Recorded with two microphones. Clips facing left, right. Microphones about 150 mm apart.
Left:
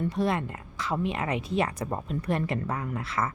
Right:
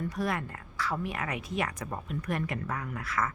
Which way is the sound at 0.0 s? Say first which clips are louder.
Left 5 dB; 25° left (ahead or behind).